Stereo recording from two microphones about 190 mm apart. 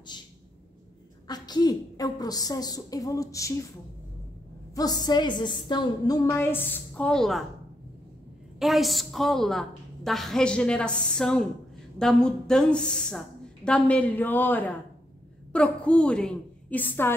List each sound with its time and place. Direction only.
0.1 s a sound: 25° left (ahead or behind)
1.2 s a woman's voice: 20° left (ahead or behind)
4.7 s a woman's voice: 20° left (ahead or behind); by 7.4 s centre (ahead or behind)
8.5 s a woman's voice: centre (ahead or behind)